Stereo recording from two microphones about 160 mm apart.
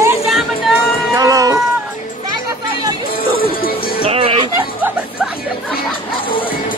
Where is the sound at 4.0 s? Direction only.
35° right (ahead or behind).